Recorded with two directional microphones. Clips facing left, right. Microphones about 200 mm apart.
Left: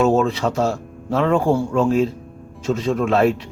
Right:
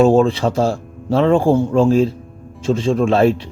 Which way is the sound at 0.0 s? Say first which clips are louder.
Right 4 dB; 30° right (ahead or behind).